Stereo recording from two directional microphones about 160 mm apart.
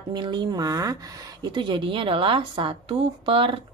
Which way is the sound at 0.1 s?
30° right (ahead or behind).